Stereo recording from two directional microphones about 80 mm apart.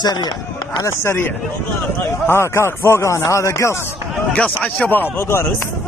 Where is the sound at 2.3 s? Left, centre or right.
Left.